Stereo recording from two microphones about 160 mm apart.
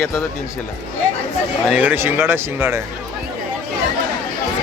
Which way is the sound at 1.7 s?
10° right (ahead or behind).